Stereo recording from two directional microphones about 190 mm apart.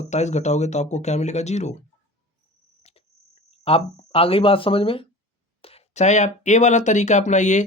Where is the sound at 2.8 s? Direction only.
35° left (ahead or behind).